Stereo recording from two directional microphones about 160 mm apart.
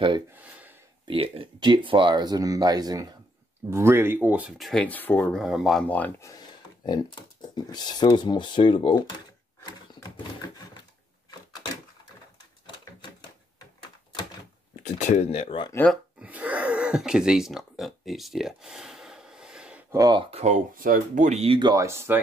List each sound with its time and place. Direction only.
0.4 s a sound: 10° right (ahead or behind)
1.0 s speech: 35° right (ahead or behind); by 5.4 s 10° left (ahead or behind)
5.4 s speech: centre (ahead or behind)
6.3 s a sound: 25° left (ahead or behind)
7.4 s speech: 25° left (ahead or behind)
14.8 s speech: 50° left (ahead or behind)
15.9 s a sound: 5° right (ahead or behind)
19.9 s speech: 25° right (ahead or behind)
20.2 s speech: 45° right (ahead or behind)
21.5 s speech: 25° right (ahead or behind)